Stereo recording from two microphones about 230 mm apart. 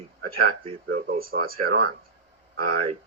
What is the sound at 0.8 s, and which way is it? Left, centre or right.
Speech, right.